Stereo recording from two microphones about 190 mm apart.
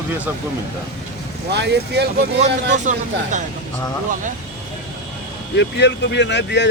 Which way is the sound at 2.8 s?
40° right (ahead or behind).